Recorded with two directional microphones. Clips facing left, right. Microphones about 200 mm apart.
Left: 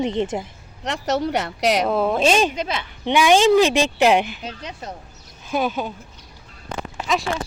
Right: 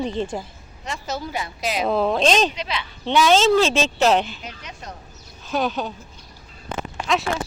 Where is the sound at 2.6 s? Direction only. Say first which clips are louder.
Left 3 dB; 45° left (ahead or behind).